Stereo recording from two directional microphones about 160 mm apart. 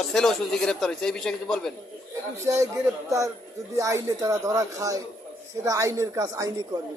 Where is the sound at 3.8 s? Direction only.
20° right (ahead or behind).